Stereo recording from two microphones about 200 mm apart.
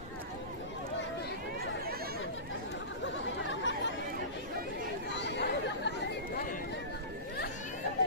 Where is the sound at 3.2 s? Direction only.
65° left (ahead or behind).